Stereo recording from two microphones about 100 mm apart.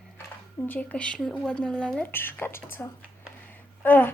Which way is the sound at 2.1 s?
20° left (ahead or behind).